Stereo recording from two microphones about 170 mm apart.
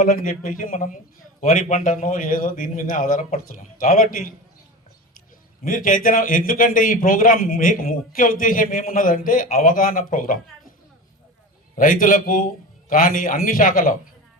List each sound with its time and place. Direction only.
0.0 s a man's voice: 55° left (ahead or behind)
5.6 s a man's voice: 55° left (ahead or behind)
11.8 s a man's voice: 55° left (ahead or behind)